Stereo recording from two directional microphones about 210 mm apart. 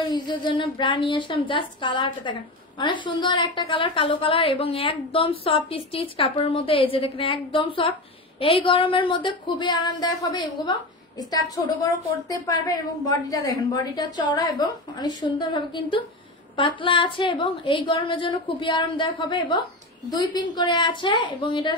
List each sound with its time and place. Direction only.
0.1 s a woman's voice: 20° left (ahead or behind)